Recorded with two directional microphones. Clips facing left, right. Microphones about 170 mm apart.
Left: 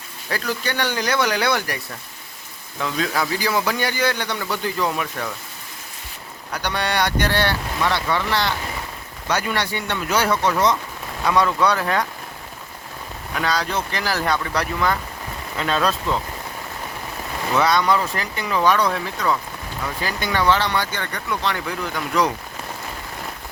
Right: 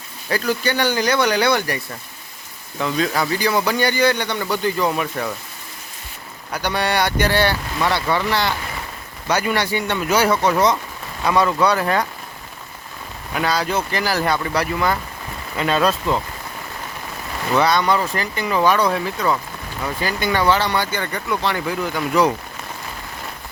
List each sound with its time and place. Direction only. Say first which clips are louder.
0.3 s a man's voice: right 5 dB; centre (ahead or behind)
6.5 s a man's voice: right 3 dB; 5° right (ahead or behind)
13.3 s speech: right 3 dB; 5° right (ahead or behind)
17.6 s a man's voice: right 1 dB; centre (ahead or behind)